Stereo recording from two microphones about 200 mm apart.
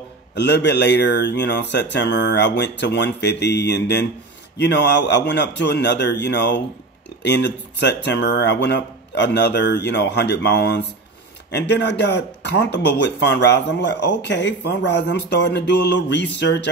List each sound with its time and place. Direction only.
0.3 s speech: 60° left (ahead or behind)